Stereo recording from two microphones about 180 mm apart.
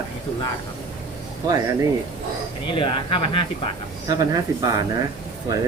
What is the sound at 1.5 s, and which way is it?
Speech, 20° right (ahead or behind).